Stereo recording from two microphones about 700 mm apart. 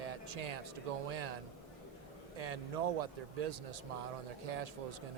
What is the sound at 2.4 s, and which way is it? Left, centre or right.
A man's voice, right.